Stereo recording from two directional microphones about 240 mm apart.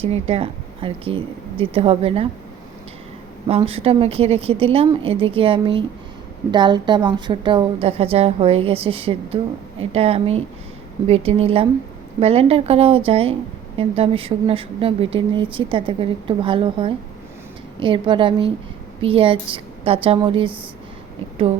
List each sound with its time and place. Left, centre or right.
0.0 s a woman's voice: right
3.5 s a woman's voice: right